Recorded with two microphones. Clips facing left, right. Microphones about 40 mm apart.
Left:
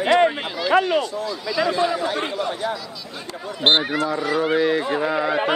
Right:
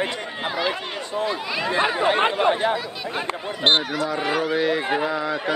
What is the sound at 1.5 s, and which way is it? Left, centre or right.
Speech, right.